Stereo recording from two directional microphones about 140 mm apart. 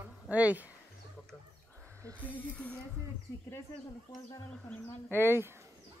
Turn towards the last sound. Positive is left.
turn(degrees=15)  # may be behind; listen again after turning